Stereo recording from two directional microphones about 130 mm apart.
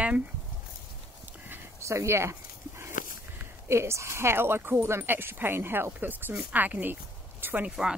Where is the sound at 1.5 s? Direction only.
20° right (ahead or behind).